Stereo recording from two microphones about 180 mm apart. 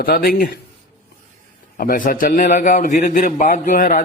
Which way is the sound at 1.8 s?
50° left (ahead or behind).